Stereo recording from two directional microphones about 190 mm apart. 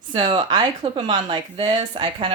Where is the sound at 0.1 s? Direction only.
25° right (ahead or behind).